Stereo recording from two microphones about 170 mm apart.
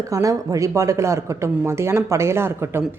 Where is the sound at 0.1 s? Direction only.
20° right (ahead or behind).